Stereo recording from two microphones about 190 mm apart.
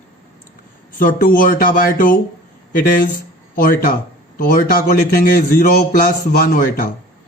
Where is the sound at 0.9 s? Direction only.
45° left (ahead or behind).